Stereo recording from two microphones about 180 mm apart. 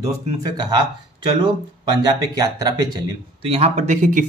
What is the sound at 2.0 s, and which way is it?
Speech, 20° right (ahead or behind).